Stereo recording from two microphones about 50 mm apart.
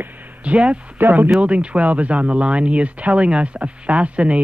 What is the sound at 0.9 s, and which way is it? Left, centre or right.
Speech, right.